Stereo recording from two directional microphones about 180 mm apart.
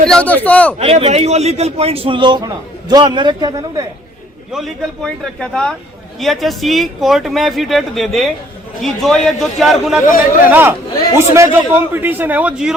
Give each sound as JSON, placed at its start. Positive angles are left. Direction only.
{"t": 0.0, "sound": "speech", "side_deg": 5}
{"t": 0.8, "sound": "a man's voice", "side_deg": -35}
{"t": 4.5, "sound": "speech", "side_deg": 0}
{"t": 10.4, "sound": "a man's voice", "side_deg": -10}